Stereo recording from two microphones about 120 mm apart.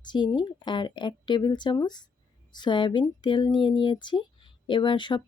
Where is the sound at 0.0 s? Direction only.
40° left (ahead or behind).